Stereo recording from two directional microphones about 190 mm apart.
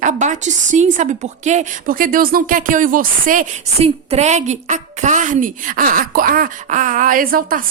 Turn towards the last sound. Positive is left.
turn(degrees=-50)  # may be behind; listen again after turning